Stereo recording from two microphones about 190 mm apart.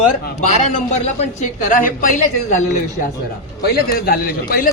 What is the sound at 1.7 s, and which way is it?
Speech, 45° left (ahead or behind).